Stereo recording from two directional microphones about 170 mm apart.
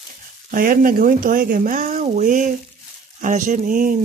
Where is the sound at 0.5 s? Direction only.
55° right (ahead or behind).